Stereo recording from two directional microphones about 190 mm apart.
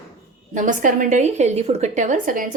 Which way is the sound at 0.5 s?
45° right (ahead or behind).